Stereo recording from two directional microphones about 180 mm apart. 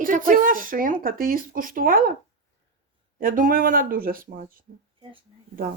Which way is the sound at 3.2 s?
50° right (ahead or behind).